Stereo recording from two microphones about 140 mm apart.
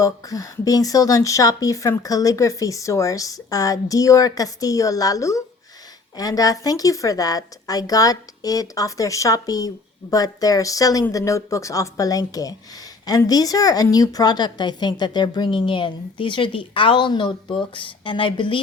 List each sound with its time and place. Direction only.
0.0 s a woman's voice: 25° left (ahead or behind)